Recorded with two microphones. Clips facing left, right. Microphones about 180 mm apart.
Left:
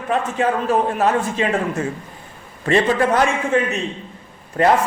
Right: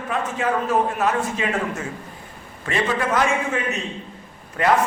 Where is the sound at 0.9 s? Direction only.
30° left (ahead or behind).